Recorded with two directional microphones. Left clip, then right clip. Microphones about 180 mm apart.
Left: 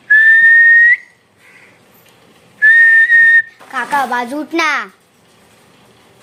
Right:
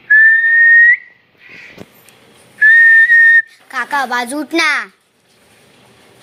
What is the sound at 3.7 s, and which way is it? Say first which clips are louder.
A child's voice: left 1 dB; 20° right (ahead or behind).